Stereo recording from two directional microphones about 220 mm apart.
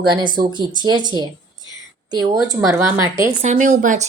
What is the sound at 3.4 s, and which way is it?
Speech, 35° right (ahead or behind).